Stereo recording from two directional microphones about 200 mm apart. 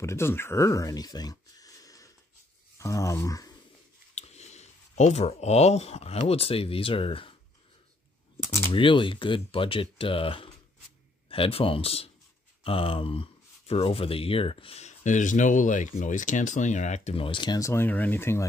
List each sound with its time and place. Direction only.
0.0 s speech: 15° left (ahead or behind)
4.1 s speech: 35° left (ahead or behind)
8.7 s speech: 25° left (ahead or behind)